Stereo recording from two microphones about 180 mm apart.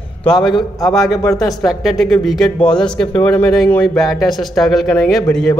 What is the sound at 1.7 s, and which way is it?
A man's voice, centre (ahead or behind).